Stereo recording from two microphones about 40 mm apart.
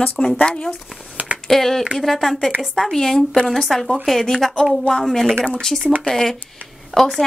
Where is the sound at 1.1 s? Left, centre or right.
Right.